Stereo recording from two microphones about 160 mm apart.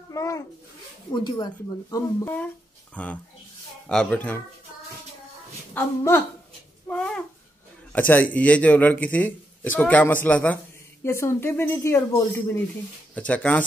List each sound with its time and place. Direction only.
0.1 s a child's voice: 20° left (ahead or behind)
2.2 s a man's voice: 10° left (ahead or behind)
5.8 s a man's voice: 15° left (ahead or behind)
6.9 s babbling: 5° left (ahead or behind)
8.1 s a man's voice: 10° left (ahead or behind)